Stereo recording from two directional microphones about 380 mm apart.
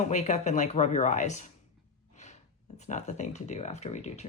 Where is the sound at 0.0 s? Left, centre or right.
Centre.